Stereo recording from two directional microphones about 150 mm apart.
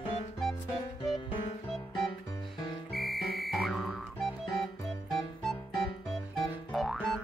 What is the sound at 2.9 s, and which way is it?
Music, centre (ahead or behind).